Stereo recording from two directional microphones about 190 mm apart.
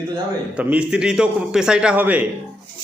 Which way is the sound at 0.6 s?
5° right (ahead or behind).